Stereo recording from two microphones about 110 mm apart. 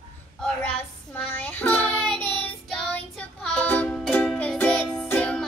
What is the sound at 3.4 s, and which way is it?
Music, 10° left (ahead or behind).